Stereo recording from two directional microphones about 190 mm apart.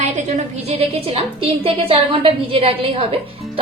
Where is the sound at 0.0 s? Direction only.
35° right (ahead or behind).